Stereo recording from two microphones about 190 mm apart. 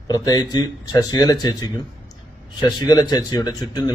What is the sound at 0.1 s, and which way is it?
Speech, 20° left (ahead or behind).